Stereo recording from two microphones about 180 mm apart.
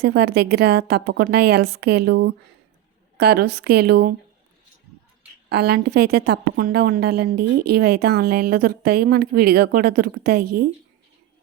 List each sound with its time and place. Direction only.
0.0 s a woman's voice: 65° right (ahead or behind)
5.5 s a woman's voice: 60° right (ahead or behind)